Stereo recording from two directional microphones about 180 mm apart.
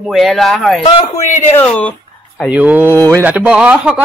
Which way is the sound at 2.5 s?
10° right (ahead or behind).